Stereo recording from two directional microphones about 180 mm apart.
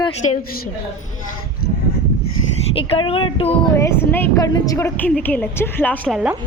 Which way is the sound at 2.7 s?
30° left (ahead or behind).